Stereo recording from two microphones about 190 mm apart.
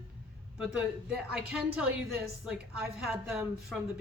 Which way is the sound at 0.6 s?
5° right (ahead or behind).